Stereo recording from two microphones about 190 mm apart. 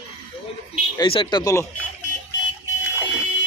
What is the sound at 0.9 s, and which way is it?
Speech, 25° left (ahead or behind).